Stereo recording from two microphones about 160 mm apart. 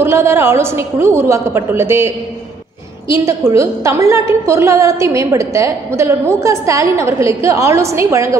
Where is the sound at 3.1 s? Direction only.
20° right (ahead or behind).